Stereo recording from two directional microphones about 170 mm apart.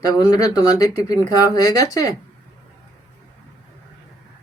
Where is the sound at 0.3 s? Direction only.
20° left (ahead or behind).